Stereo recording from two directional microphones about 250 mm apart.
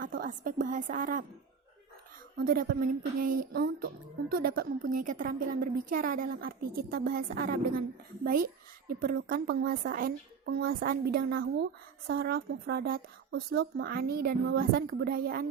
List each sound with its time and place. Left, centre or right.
0.0 s a woman's voice: right
2.4 s a woman's voice: right